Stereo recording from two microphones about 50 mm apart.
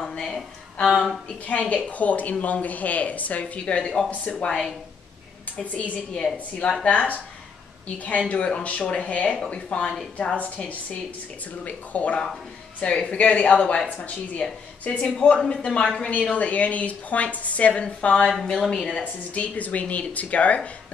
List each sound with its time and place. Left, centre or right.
0.0 s a sound: centre
1.5 s a woman's voice: left
5.6 s a woman's voice: left
18.3 s speech: centre
18.9 s a woman's voice: left